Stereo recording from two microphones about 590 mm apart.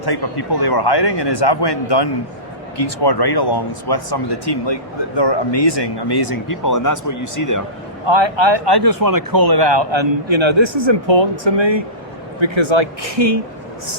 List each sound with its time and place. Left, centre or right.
0.0 s speech: left
8.0 s speech: right